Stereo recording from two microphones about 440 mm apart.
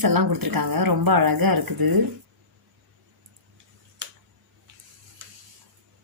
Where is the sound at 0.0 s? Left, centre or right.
Right.